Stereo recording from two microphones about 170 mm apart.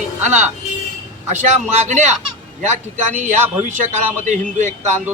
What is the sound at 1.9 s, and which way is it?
A man's voice, 45° right (ahead or behind).